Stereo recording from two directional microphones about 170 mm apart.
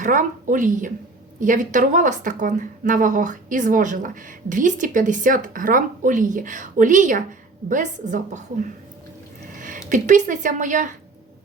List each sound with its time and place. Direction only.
0.0 s a woman's voice: 50° right (ahead or behind)
9.6 s a sound: 50° right (ahead or behind)
9.9 s a woman's voice: 50° right (ahead or behind)